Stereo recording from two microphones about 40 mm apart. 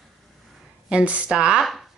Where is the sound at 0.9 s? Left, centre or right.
Right.